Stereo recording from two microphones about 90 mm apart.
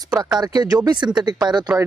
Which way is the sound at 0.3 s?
50° right (ahead or behind).